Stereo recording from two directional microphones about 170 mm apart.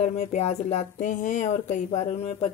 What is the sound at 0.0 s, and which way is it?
Speech, 40° left (ahead or behind).